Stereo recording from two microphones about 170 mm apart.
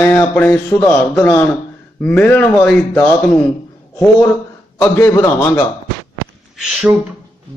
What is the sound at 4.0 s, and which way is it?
Speech, 10° left (ahead or behind).